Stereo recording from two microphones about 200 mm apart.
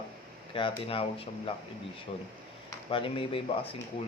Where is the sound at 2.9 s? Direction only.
25° left (ahead or behind).